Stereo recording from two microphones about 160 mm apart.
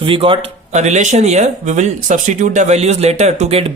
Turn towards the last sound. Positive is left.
turn(degrees=-40)  # may be behind; listen again after turning